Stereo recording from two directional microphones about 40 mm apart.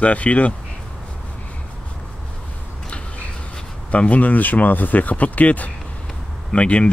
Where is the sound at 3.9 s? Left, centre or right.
Left.